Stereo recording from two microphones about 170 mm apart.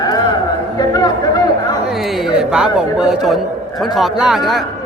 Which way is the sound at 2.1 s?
5° right (ahead or behind).